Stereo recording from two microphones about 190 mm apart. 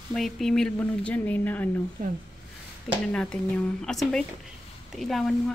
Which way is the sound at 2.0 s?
45° right (ahead or behind).